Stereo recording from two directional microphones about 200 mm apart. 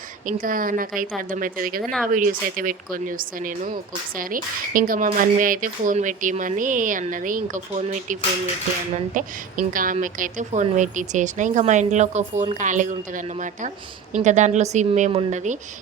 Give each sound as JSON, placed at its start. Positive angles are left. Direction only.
{"t": 0.3, "sound": "speech", "side_deg": -45}
{"t": 1.8, "sound": "speech", "side_deg": 5}
{"t": 2.1, "sound": "a woman's voice", "side_deg": -45}